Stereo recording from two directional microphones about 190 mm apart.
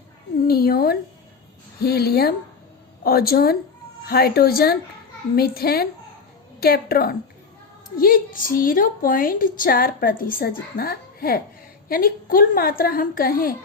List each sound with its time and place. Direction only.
0.4 s a woman's voice: 55° left (ahead or behind)